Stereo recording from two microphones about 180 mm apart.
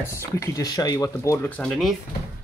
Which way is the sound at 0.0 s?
15° left (ahead or behind).